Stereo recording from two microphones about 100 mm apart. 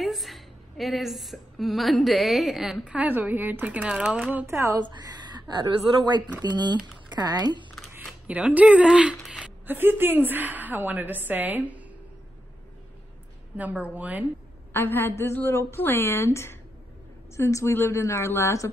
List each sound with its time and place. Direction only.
0.0 s a woman's voice: centre (ahead or behind)
2.8 s a woman's voice: 15° right (ahead or behind)
4.8 s a woman's voice: 45° right (ahead or behind)
8.3 s a woman's voice: 15° right (ahead or behind)
9.2 s a sound: 5° right (ahead or behind)
9.7 s a woman's voice: 20° right (ahead or behind)
13.6 s a woman's voice: 15° right (ahead or behind)
14.7 s a woman's voice: 20° left (ahead or behind)